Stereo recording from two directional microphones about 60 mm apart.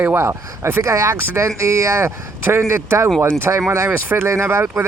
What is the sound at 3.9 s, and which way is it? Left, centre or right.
Speech, right.